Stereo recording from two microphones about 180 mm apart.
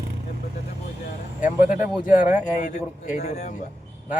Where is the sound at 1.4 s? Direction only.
45° left (ahead or behind).